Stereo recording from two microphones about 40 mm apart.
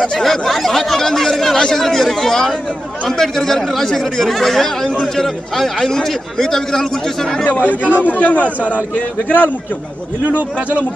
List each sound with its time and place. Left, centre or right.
0.2 s speech: centre
7.5 s a man's voice: left